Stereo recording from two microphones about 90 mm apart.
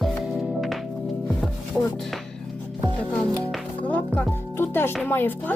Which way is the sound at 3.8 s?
20° left (ahead or behind).